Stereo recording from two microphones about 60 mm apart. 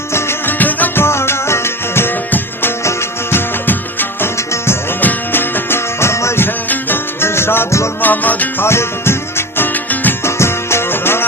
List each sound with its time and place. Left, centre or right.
0.1 s music: left
0.6 s music: left
1.0 s music: left
3.7 s music: left
4.4 s music: left
4.9 s music: left
6.7 s music: left
8.0 s music: left
8.6 s music: left
10.2 s music: left